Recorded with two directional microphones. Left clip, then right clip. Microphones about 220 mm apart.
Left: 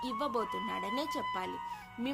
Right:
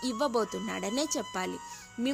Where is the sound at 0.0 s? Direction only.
40° right (ahead or behind).